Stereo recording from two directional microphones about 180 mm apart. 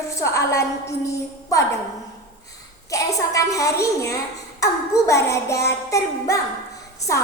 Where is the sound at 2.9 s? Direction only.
20° left (ahead or behind).